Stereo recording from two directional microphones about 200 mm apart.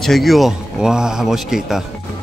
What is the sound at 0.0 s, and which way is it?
Speech, centre (ahead or behind).